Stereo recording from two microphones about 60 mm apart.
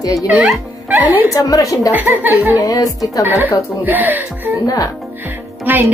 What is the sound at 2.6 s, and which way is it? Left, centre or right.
Speech, left.